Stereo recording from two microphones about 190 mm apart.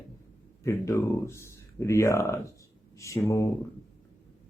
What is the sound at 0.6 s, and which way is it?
Speech, 15° left (ahead or behind).